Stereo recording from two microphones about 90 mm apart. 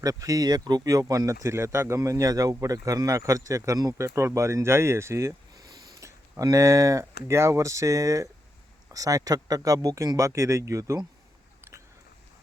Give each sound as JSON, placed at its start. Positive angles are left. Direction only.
{"t": 0.0, "sound": "speech", "side_deg": -40}